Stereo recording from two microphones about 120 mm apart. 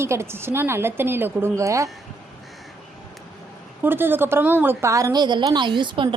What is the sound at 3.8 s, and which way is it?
A woman's voice, 15° right (ahead or behind).